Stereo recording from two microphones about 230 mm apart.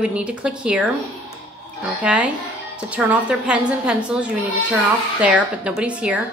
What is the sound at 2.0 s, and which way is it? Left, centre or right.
A woman's voice, centre.